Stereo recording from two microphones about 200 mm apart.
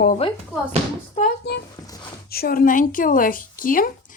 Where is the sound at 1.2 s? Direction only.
50° left (ahead or behind).